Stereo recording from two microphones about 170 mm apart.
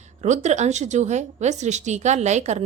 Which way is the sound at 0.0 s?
45° right (ahead or behind).